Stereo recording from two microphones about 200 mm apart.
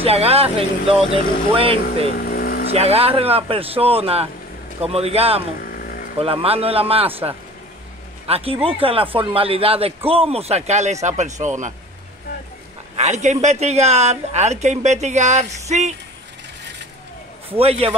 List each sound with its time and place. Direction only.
0.0 s speech: 30° right (ahead or behind)
2.1 s vehicle: 50° left (ahead or behind)
2.7 s speech: 30° right (ahead or behind)
5.6 s vehicle: 45° left (ahead or behind)
6.1 s speech: 30° right (ahead or behind)
8.3 s speech: 30° right (ahead or behind)
12.9 s speech: 35° right (ahead or behind)
17.5 s speech: 30° right (ahead or behind)